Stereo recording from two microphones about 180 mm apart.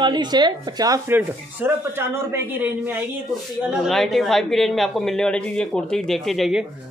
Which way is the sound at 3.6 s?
Centre (ahead or behind).